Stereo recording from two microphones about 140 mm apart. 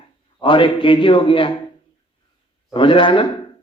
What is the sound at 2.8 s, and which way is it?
Speech, 35° left (ahead or behind).